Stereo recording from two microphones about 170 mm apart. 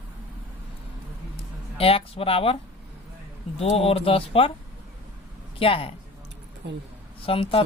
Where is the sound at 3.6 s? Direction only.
35° left (ahead or behind).